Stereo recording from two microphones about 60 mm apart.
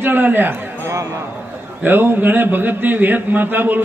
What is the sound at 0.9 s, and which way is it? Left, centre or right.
Music, right.